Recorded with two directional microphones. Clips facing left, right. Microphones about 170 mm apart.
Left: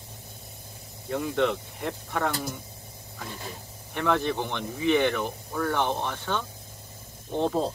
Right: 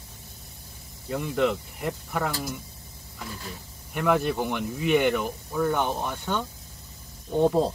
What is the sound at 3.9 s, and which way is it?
Speech, 5° right (ahead or behind).